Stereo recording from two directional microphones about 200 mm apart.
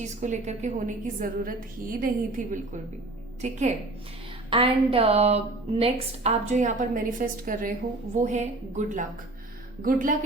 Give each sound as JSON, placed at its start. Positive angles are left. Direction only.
{"t": 0.0, "sound": "a woman's voice", "side_deg": -35}
{"t": 4.4, "sound": "a woman's voice", "side_deg": -25}